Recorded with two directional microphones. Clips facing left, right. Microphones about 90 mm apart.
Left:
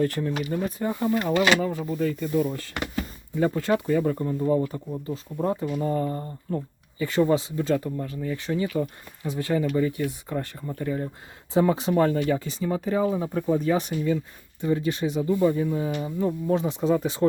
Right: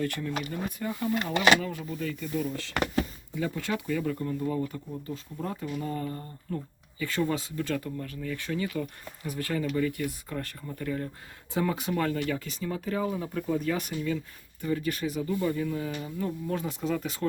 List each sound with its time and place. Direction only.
0.0 s speech: 35° left (ahead or behind)
4.2 s speech: 25° left (ahead or behind)